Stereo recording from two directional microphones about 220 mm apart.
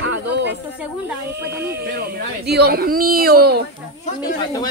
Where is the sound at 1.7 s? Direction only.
45° right (ahead or behind).